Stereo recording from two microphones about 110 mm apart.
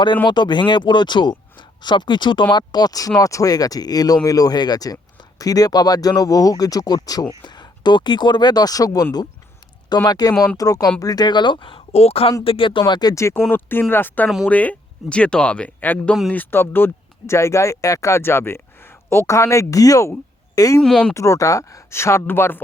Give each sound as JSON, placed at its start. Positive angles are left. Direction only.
{"t": 0.3, "sound": "speech", "side_deg": 45}
{"t": 12.5, "sound": "speech", "side_deg": 50}
{"t": 12.8, "sound": "speech", "side_deg": 35}
{"t": 20.8, "sound": "speech", "side_deg": 5}
{"t": 21.1, "sound": "speech", "side_deg": 30}